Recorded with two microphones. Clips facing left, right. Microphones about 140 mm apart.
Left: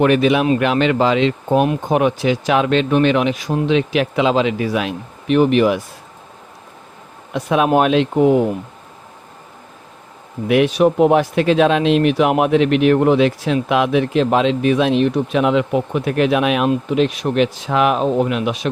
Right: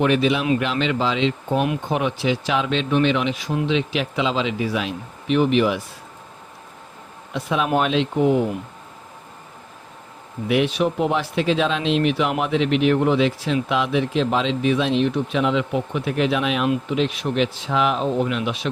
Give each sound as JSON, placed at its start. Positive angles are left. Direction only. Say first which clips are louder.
{"t": 0.0, "sound": "a man's voice", "louder": "left 5 dB", "side_deg": 55}
{"t": 7.3, "sound": "a man's voice", "louder": "left 6 dB", "side_deg": 50}
{"t": 10.5, "sound": "a man's voice", "louder": "left 6 dB", "side_deg": 55}